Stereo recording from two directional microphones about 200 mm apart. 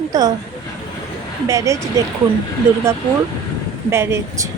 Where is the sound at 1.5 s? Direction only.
15° right (ahead or behind).